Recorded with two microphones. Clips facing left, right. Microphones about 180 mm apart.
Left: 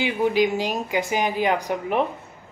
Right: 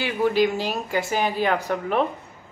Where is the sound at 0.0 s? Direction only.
15° left (ahead or behind).